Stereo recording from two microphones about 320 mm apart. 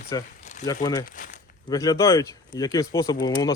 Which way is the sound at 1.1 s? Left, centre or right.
Left.